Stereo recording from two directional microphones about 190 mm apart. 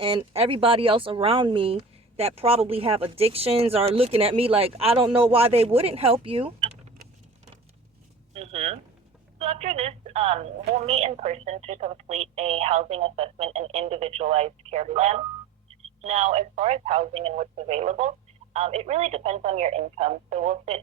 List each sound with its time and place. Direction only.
0.3 s speech: 30° right (ahead or behind)
8.3 s speech: 35° right (ahead or behind)